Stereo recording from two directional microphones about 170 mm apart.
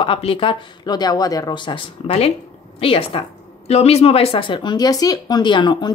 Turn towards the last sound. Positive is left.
turn(degrees=25)  # may be behind; listen again after turning